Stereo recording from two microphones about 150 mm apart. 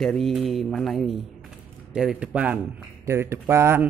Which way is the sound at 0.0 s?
Centre (ahead or behind).